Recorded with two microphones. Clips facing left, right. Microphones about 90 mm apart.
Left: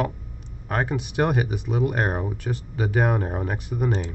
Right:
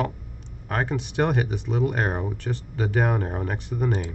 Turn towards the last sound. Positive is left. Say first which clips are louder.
# left 1 dB
turn(degrees=5)  # may be behind; listen again after turning